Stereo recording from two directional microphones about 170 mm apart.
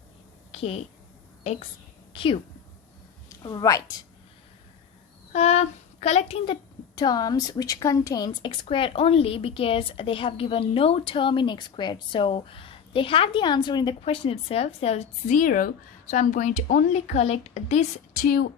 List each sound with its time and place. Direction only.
0.5 s a woman's voice: 35° left (ahead or behind)
2.1 s a woman's voice: 30° left (ahead or behind)
5.3 s a woman's voice: 40° left (ahead or behind); by 18.4 s 55° left (ahead or behind)